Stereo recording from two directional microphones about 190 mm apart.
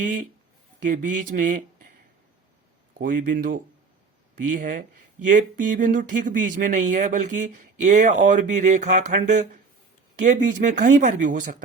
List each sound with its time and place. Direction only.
0.9 s speech: 40° right (ahead or behind)
3.0 s speech: 45° right (ahead or behind)